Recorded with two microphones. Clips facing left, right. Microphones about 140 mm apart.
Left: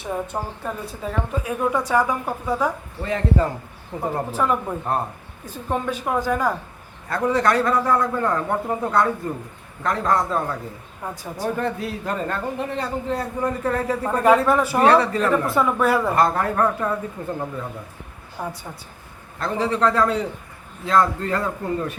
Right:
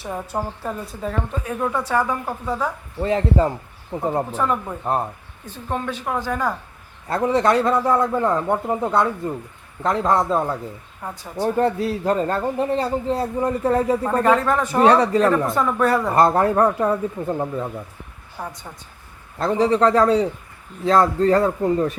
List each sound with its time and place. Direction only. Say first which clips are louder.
0.0 s a woman's voice: even; 5° right (ahead or behind)
1.7 s a woman's voice: left 1 dB; 15° left (ahead or behind)
3.0 s a man's voice: right 3 dB; 30° right (ahead or behind)
5.5 s a woman's voice: left 1 dB; 10° left (ahead or behind)
7.1 s a man's voice: right 2 dB; 25° right (ahead or behind)
11.1 s a woman's voice: right 6 dB; 10° left (ahead or behind)
11.4 s a man's voice: right 5 dB; 35° right (ahead or behind)
14.1 s a woman's voice: left 4 dB; 10° left (ahead or behind)
15.0 s a man's voice: right 5 dB; 30° right (ahead or behind)
15.3 s a woman's voice: even; 5° left (ahead or behind)
16.1 s a man's voice: right 4 dB; 25° right (ahead or behind)
18.4 s a woman's voice: left 2 dB; 5° left (ahead or behind)
19.4 s a man's voice: right 4 dB; 30° right (ahead or behind)